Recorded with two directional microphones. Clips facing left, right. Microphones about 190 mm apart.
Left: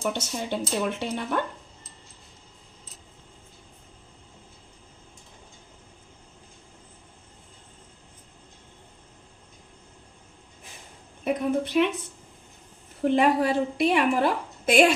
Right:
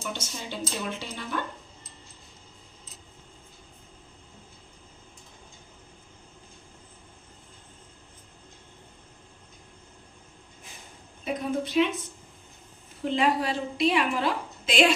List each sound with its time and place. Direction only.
0.0 s speech: 60° left (ahead or behind)
11.2 s speech: 60° left (ahead or behind)
13.0 s a woman's voice: 55° left (ahead or behind)